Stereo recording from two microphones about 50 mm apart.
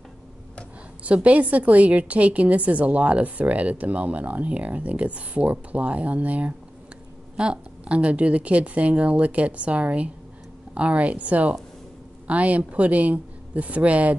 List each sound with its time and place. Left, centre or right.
1.0 s a woman's voice: right